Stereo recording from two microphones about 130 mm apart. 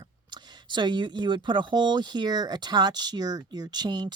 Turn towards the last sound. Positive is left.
turn(degrees=-35)  # may be behind; listen again after turning